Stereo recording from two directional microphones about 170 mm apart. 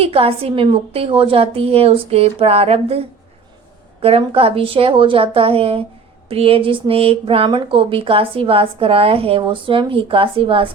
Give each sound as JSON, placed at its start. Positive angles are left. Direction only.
{"t": 0.0, "sound": "speech", "side_deg": -35}